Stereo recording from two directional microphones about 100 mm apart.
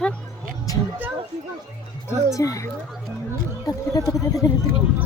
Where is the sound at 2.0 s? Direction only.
30° left (ahead or behind).